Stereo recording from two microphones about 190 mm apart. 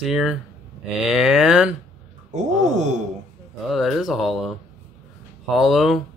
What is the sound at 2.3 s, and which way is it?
Speech, 40° right (ahead or behind).